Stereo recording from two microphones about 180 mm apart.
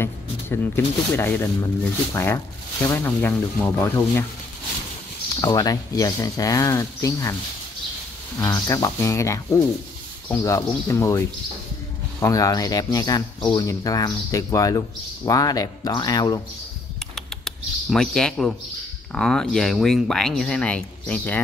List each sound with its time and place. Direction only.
0.0 s speech: 15° left (ahead or behind)
5.3 s speech: 20° left (ahead or behind)
8.4 s speech: 20° left (ahead or behind)
17.1 s bird: centre (ahead or behind)
19.1 s speech: centre (ahead or behind)